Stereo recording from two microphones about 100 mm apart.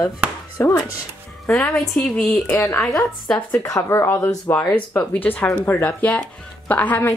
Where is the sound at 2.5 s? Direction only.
25° left (ahead or behind).